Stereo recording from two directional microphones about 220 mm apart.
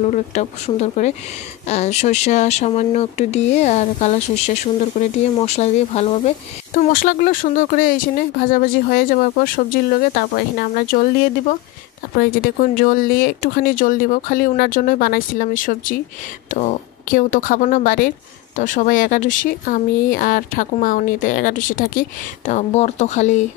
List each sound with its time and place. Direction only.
0.1 s speech: 30° left (ahead or behind)